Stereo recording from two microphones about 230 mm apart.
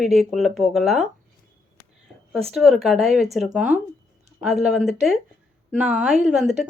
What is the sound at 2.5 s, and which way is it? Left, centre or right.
Speech, centre.